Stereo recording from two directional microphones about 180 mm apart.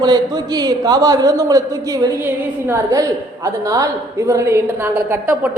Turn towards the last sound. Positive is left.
turn(degrees=-10)  # may be behind; listen again after turning